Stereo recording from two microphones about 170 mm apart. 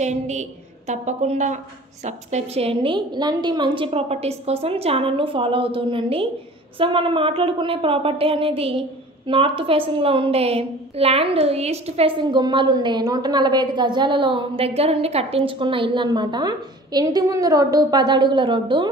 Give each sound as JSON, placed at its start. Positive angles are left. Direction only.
{"t": 0.0, "sound": "a woman's voice", "side_deg": -45}